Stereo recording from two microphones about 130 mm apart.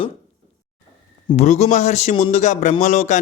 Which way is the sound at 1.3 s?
55° left (ahead or behind).